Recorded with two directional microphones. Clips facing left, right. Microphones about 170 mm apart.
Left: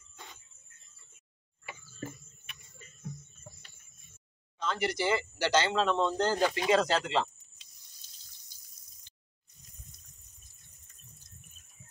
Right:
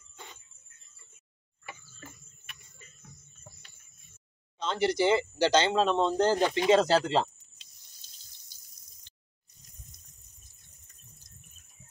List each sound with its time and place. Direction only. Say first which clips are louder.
4.6 s speech: right 5 dB; 25° right (ahead or behind)